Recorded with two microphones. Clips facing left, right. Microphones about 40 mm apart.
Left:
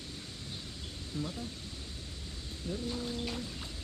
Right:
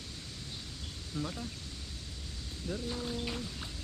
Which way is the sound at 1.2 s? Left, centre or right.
Centre.